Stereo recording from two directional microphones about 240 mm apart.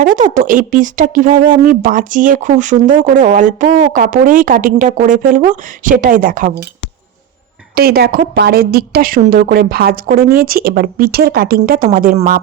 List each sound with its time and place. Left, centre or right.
0.0 s speech: right
7.8 s speech: right